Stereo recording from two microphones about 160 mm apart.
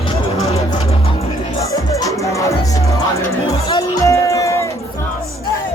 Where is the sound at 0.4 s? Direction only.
40° left (ahead or behind).